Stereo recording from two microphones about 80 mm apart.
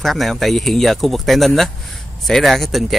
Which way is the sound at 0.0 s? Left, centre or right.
Centre.